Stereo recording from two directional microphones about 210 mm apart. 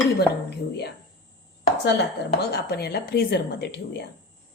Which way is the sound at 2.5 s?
50° left (ahead or behind).